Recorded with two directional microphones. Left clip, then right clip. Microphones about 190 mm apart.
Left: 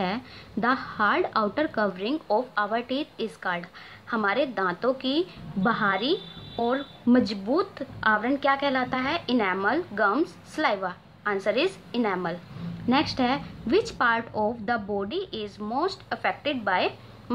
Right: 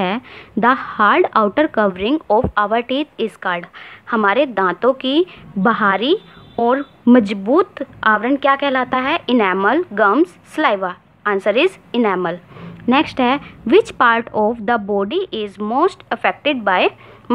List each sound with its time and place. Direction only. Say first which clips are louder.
0.0 s a woman's voice: right 9 dB; 45° right (ahead or behind)